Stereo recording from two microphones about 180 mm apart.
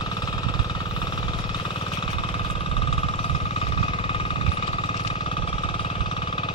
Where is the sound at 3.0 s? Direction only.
30° left (ahead or behind).